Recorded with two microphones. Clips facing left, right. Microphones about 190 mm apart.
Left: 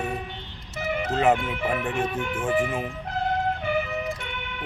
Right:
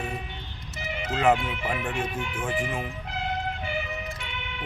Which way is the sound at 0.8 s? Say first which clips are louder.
Left 5 dB; 50° left (ahead or behind).